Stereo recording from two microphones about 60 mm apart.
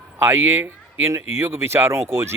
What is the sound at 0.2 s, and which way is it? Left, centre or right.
Speech, right.